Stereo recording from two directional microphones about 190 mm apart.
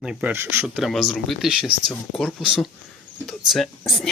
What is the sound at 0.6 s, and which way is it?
Speech, centre (ahead or behind).